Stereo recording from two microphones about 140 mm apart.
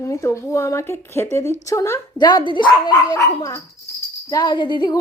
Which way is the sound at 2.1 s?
30° left (ahead or behind).